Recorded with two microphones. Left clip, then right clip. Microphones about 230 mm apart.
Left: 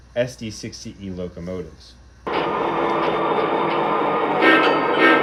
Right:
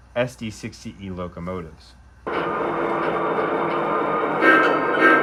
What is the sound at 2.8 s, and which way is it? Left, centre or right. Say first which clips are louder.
Music: left 3 dB; centre.